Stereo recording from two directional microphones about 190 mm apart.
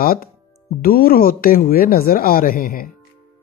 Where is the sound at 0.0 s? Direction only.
50° left (ahead or behind).